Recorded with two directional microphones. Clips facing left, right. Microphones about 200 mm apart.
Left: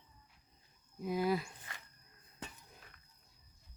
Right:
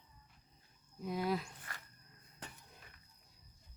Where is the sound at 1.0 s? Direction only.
5° left (ahead or behind).